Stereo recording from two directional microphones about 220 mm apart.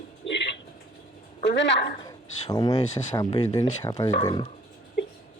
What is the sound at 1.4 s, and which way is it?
Speech, 55° left (ahead or behind).